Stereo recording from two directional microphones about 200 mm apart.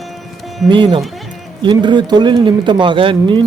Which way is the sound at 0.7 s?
25° right (ahead or behind).